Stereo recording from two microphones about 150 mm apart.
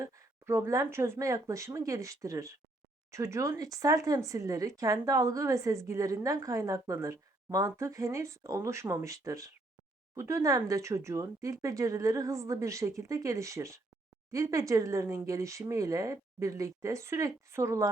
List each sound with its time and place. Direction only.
0.0 s speech: 20° right (ahead or behind)